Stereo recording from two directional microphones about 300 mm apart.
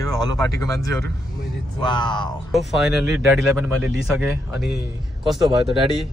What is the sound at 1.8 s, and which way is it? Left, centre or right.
Speech, centre.